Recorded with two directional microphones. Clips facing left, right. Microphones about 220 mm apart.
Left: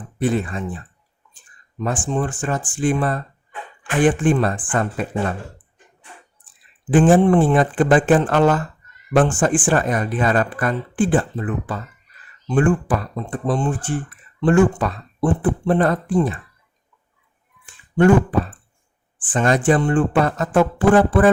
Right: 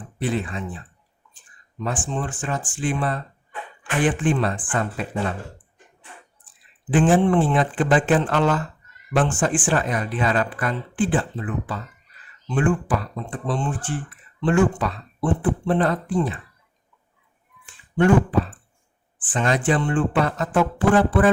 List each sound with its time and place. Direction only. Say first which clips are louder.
0.2 s speech: left 4 dB; 45° left (ahead or behind)
1.8 s speech: left 5 dB; 45° left (ahead or behind)
6.9 s speech: left 4 dB; 45° left (ahead or behind)
19.3 s speech: left 4 dB; 45° left (ahead or behind)